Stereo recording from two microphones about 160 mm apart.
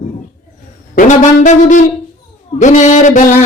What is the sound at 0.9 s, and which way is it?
Speech, 55° left (ahead or behind).